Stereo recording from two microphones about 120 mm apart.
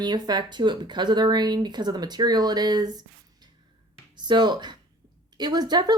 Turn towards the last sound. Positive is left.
turn(degrees=-35)  # may be behind; listen again after turning